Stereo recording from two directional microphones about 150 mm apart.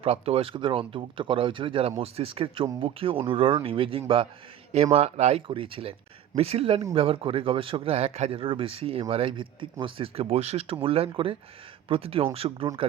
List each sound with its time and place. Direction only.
0.0 s speech: 40° right (ahead or behind)